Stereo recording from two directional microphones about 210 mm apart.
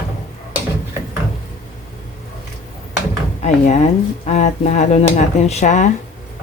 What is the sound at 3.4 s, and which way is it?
Speech, 35° left (ahead or behind).